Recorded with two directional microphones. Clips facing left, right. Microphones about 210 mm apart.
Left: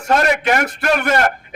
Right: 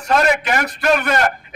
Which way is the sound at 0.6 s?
55° left (ahead or behind).